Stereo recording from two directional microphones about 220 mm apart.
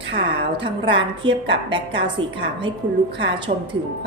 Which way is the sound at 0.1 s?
20° right (ahead or behind).